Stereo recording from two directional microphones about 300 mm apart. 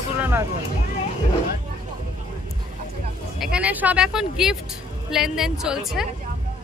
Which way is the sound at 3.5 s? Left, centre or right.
Centre.